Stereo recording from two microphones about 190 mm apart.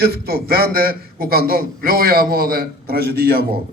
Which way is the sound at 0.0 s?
55° right (ahead or behind).